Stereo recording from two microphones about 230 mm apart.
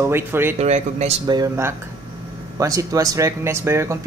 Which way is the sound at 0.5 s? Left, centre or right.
Right.